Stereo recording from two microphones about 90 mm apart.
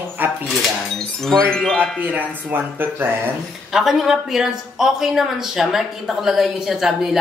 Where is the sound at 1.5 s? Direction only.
10° left (ahead or behind).